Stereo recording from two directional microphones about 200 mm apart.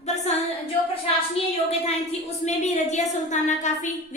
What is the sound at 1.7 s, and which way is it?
A woman's voice, 30° left (ahead or behind).